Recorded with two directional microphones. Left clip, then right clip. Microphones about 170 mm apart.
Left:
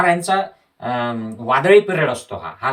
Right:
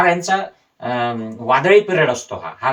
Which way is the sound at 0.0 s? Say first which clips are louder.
Right 1 dB; 20° left (ahead or behind).